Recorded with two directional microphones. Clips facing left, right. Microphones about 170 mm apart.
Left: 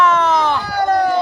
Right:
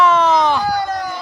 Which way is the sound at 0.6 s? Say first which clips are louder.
Left 4 dB; 65° left (ahead or behind).